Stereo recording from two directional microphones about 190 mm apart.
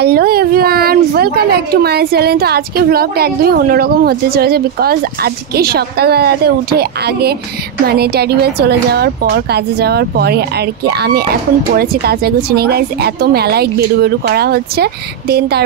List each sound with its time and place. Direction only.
0.0 s speech: 55° right (ahead or behind)